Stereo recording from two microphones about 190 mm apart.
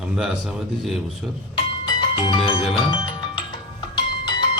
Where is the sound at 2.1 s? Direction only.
25° left (ahead or behind).